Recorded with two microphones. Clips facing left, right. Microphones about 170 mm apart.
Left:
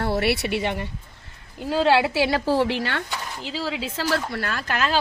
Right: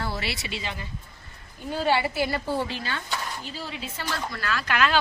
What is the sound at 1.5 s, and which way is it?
A woman's voice, 90° left.